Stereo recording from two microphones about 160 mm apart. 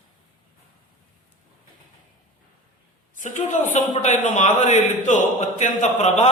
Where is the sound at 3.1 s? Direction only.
50° left (ahead or behind).